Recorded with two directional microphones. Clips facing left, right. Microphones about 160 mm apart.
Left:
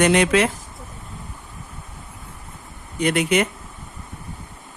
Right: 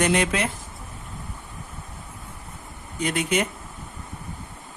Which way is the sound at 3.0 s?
70° left (ahead or behind).